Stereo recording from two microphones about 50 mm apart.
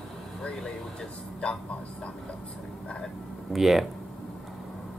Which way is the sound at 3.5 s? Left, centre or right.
Centre.